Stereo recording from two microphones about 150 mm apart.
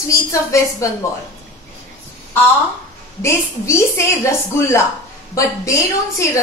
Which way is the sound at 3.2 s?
20° left (ahead or behind).